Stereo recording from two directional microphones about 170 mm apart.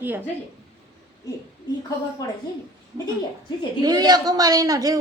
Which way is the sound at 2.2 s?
20° left (ahead or behind).